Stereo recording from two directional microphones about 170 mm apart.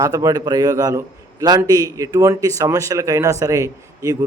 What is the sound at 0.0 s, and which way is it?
A man's voice, 20° right (ahead or behind).